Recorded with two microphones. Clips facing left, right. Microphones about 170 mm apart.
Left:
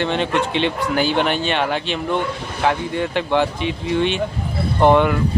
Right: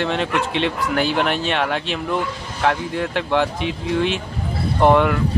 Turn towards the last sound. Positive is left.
turn(degrees=0)  # may be behind; listen again after turning